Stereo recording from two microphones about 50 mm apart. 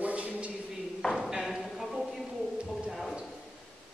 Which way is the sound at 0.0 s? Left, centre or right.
Right.